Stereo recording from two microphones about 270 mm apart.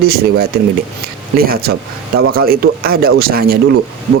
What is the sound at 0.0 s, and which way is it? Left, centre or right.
Speech, right.